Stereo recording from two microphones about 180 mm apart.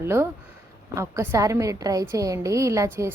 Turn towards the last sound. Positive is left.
turn(degrees=-15)  # may be behind; listen again after turning